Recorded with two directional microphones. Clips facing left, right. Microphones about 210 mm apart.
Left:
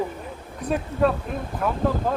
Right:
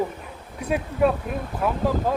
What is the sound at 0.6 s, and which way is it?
Speech, 10° right (ahead or behind).